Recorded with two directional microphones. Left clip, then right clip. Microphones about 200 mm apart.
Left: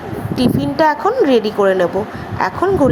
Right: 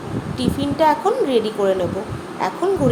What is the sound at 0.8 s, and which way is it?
A woman's voice, 25° left (ahead or behind).